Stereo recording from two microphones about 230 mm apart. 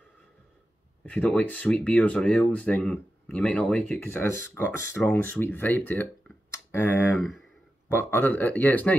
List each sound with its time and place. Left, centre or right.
1.0 s speech: centre
7.2 s speech: centre